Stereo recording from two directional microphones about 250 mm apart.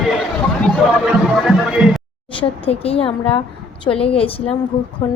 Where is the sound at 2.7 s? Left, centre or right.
Left.